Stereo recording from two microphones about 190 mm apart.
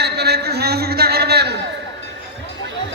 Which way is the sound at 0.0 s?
60° right (ahead or behind).